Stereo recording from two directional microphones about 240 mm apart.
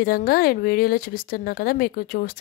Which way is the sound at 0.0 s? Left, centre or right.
Left.